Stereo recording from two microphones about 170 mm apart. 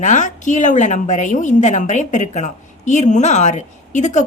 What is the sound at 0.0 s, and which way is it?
A woman's voice, 45° left (ahead or behind).